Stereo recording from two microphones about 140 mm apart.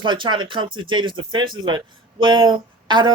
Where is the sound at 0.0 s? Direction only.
35° right (ahead or behind).